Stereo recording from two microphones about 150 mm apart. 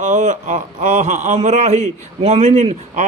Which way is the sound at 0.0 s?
55° right (ahead or behind).